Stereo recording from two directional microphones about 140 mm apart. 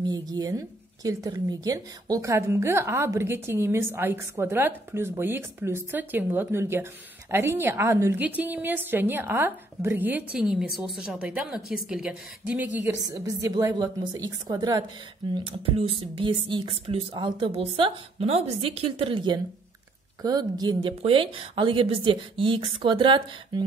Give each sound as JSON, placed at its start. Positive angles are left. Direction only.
{"t": 0.0, "sound": "speech", "side_deg": -30}
{"t": 13.0, "sound": "a woman's voice", "side_deg": -25}